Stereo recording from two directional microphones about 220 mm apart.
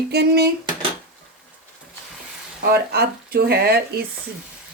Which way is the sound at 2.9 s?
45° right (ahead or behind).